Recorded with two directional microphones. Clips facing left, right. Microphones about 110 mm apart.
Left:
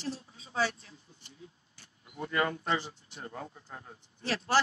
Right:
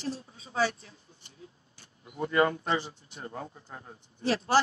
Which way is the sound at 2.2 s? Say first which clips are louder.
Right 5 dB; 30° right (ahead or behind).